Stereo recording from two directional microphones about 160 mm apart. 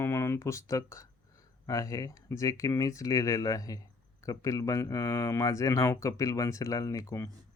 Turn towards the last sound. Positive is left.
turn(degrees=20)  # may be behind; listen again after turning